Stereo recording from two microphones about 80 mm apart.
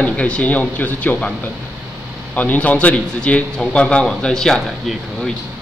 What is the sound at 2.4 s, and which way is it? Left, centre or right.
A man's voice, centre.